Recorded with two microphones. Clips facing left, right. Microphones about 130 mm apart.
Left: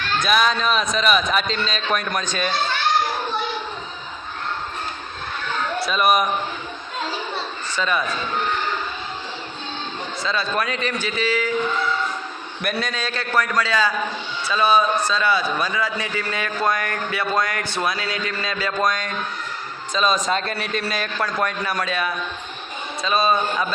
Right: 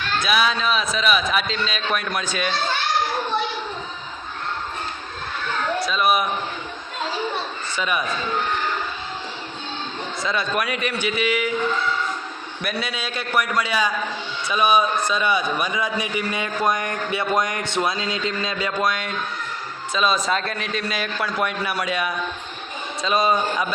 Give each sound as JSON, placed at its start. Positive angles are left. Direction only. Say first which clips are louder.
{"t": 0.2, "sound": "a man's voice", "louder": "left 2 dB", "side_deg": -5}
{"t": 5.8, "sound": "a man's voice", "louder": "left 3 dB", "side_deg": 0}
{"t": 7.8, "sound": "a man's voice", "louder": "left 2 dB", "side_deg": -10}
{"t": 10.2, "sound": "a man's voice", "louder": "even", "side_deg": -15}
{"t": 12.6, "sound": "a man's voice", "louder": "left 2 dB", "side_deg": -5}
{"t": 18.8, "sound": "a man's voice", "louder": "left 2 dB", "side_deg": -5}